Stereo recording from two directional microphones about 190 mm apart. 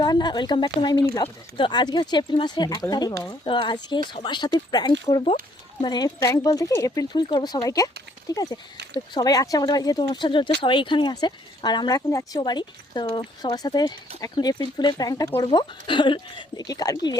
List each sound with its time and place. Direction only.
0.0 s speech: 20° left (ahead or behind)